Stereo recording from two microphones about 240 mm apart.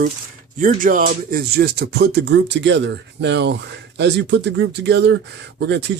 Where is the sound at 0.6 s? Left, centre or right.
Right.